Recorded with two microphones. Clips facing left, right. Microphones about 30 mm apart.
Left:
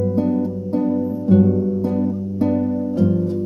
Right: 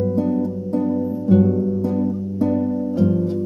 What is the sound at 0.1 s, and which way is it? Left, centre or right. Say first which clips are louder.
Music: left 1 dB; left.